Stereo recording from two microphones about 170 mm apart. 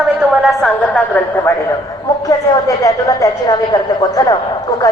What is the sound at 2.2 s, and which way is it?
A woman's voice, 20° left (ahead or behind).